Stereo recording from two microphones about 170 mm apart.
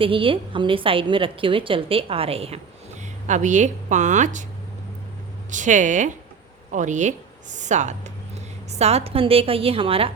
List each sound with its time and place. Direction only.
0.0 s a woman's voice: 30° right (ahead or behind); by 4.4 s 45° right (ahead or behind)
5.5 s a woman's voice: 45° right (ahead or behind)